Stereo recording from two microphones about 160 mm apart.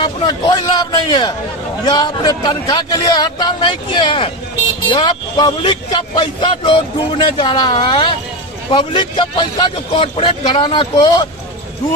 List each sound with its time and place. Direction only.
0.0 s a man's voice: 25° left (ahead or behind)